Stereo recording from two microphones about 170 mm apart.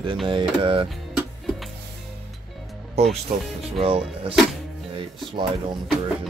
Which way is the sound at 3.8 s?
35° right (ahead or behind).